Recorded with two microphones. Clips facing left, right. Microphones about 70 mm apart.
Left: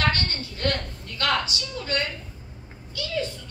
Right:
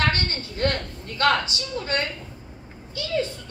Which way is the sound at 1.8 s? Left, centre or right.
Right.